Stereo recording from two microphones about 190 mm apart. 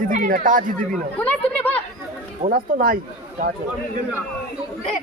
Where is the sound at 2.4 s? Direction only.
50° right (ahead or behind).